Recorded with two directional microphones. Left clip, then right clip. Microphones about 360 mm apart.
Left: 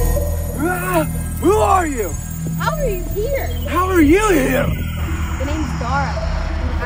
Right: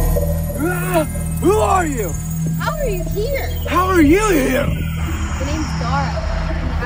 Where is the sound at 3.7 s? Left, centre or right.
Centre.